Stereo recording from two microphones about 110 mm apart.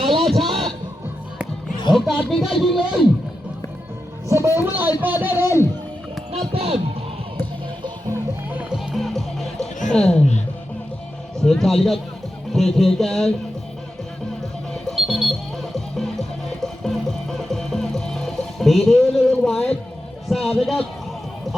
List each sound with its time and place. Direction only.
0.2 s a sound: centre (ahead or behind)
1.9 s speech: centre (ahead or behind)
4.3 s a man's voice: 25° right (ahead or behind)
6.4 s speech: 60° right (ahead or behind)
8.1 s music: 15° right (ahead or behind)
8.7 s music: centre (ahead or behind)
11.3 s a man's voice: 5° left (ahead or behind)
14.7 s music: centre (ahead or behind)
19.3 s a sound: 10° left (ahead or behind)
20.2 s a man's voice: centre (ahead or behind)